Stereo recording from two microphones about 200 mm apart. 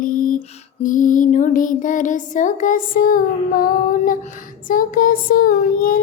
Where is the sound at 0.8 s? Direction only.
40° left (ahead or behind).